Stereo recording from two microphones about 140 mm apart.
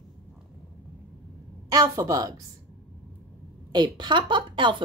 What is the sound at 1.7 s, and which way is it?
Speech, 25° right (ahead or behind).